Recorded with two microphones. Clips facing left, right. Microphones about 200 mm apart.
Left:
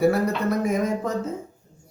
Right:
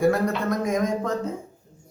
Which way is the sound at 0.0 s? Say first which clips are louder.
Left 1 dB; 5° left (ahead or behind).